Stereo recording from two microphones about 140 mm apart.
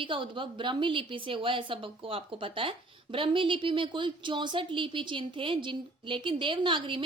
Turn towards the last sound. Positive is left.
turn(degrees=-35)  # may be behind; listen again after turning